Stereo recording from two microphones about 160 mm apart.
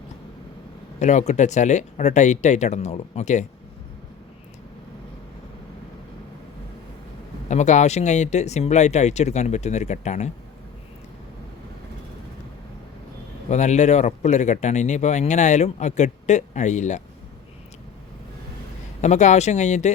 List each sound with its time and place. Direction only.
0.9 s speech: 50° left (ahead or behind)
7.4 s speech: 45° left (ahead or behind)
13.5 s speech: 45° left (ahead or behind)
19.0 s speech: 45° left (ahead or behind)